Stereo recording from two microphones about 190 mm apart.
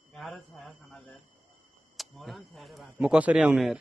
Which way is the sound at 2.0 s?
Centre (ahead or behind).